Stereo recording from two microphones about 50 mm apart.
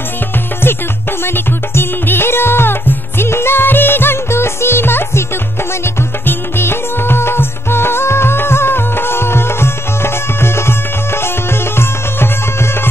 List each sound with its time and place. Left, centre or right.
1.2 s music: left
6.2 s music: left